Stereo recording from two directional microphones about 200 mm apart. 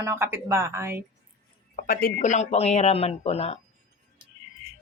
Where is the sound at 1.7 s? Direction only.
45° left (ahead or behind).